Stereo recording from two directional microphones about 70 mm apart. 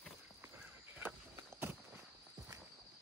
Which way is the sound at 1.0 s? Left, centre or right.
Right.